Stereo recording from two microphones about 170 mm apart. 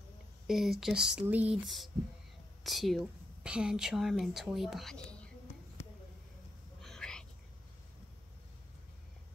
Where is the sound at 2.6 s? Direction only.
Centre (ahead or behind).